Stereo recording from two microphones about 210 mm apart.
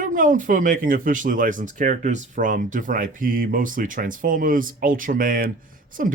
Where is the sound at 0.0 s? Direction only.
40° right (ahead or behind).